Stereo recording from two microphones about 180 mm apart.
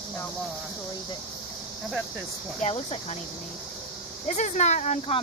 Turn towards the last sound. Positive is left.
turn(degrees=40)  # may be behind; listen again after turning